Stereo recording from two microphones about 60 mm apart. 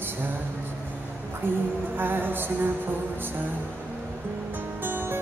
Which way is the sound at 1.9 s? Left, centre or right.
Right.